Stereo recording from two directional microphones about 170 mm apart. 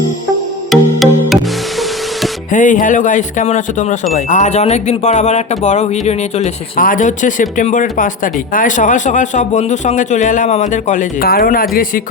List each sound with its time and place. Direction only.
0.7 s music: centre (ahead or behind)
2.5 s speech: 50° left (ahead or behind)
6.7 s speech: 55° left (ahead or behind)